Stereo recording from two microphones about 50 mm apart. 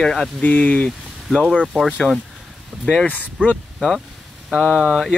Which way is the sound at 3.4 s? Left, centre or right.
Right.